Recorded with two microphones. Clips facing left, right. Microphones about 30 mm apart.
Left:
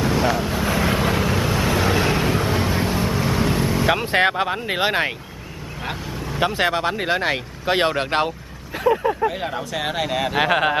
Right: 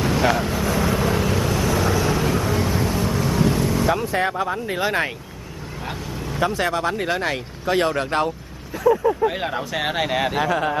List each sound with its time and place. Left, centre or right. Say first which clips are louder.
0.2 s speech: right 1 dB; centre
0.7 s vehicle: left 2 dB; left
1.1 s vehicle: left 1 dB; centre; by 2.2 s left
2.2 s vehicle: left 1 dB; left
3.8 s speech: left 6 dB; left
6.4 s speech: left 1 dB; left
9.3 s speech: right 1 dB; centre
10.3 s speech: left 3 dB; left